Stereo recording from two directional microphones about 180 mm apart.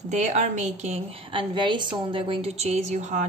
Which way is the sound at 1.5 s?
25° right (ahead or behind).